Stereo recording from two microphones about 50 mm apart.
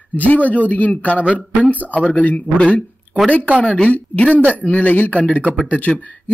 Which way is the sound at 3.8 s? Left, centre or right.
Left.